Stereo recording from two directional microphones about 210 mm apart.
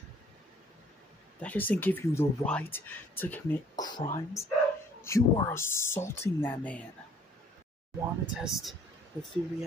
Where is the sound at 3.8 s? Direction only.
20° left (ahead or behind).